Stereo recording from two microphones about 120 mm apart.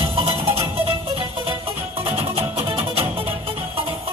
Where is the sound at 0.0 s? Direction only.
50° right (ahead or behind).